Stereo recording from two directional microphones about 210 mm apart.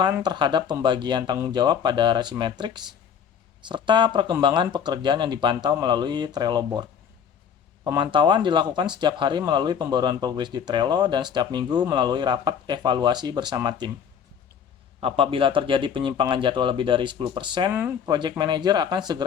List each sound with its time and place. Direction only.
0.2 s speech: 20° right (ahead or behind)
7.9 s speech: 25° right (ahead or behind)
15.0 s speech: 25° right (ahead or behind)
17.7 s speech: 10° right (ahead or behind)